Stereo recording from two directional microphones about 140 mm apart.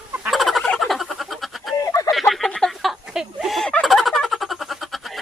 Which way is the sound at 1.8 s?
25° left (ahead or behind).